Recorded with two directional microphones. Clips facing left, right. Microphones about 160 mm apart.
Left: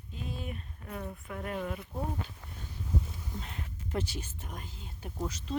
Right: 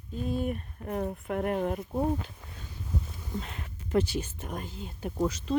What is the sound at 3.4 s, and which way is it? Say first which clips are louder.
Speech: right 1 dB; 85° right.